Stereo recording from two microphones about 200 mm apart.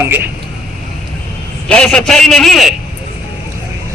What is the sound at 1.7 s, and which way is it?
A man's voice, 5° left (ahead or behind).